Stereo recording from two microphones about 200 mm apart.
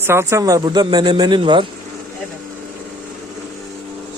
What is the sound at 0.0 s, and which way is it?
Speech, 15° right (ahead or behind).